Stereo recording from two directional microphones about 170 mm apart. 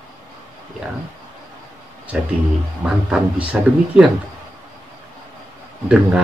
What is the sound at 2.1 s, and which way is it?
Speech, 5° right (ahead or behind).